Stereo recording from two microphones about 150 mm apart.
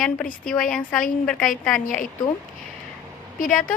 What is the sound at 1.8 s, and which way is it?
Speech, 65° left (ahead or behind).